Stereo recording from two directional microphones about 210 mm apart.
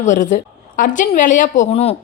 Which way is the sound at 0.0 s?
35° left (ahead or behind).